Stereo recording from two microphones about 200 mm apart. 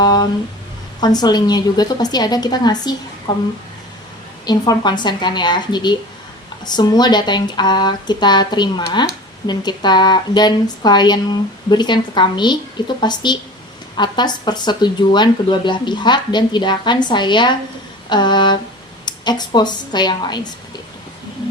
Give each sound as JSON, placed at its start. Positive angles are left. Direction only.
{"t": 0.0, "sound": "speech", "side_deg": 20}
{"t": 4.4, "sound": "speech", "side_deg": 20}